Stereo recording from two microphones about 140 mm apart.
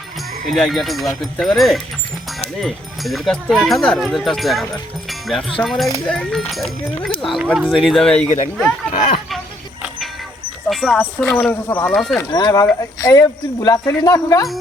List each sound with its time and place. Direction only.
0.4 s speech: centre (ahead or behind)
8.9 s speech: 70° left (ahead or behind)
10.7 s speech: 5° right (ahead or behind)
10.9 s speech: 15° left (ahead or behind)
12.3 s speech: 30° left (ahead or behind)